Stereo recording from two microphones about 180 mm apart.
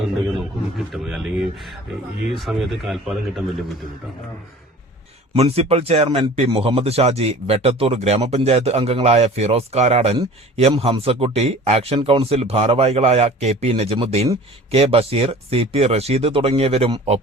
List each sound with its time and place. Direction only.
0.3 s speech: 5° right (ahead or behind)
5.3 s a man's voice: 35° right (ahead or behind)